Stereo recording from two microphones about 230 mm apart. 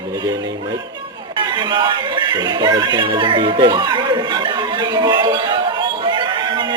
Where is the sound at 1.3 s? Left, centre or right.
Centre.